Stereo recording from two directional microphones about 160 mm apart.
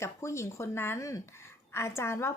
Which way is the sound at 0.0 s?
20° left (ahead or behind).